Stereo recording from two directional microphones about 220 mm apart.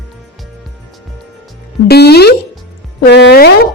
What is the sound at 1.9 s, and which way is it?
Speech, 45° left (ahead or behind).